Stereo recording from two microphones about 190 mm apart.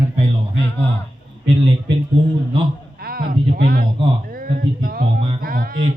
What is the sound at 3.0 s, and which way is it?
Speech, 50° right (ahead or behind).